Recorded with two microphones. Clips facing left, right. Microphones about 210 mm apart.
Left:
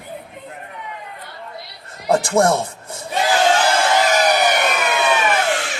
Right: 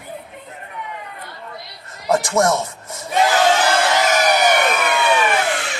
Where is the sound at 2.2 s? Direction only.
30° left (ahead or behind).